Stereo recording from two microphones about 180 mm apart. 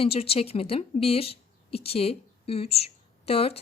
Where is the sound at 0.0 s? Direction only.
30° left (ahead or behind).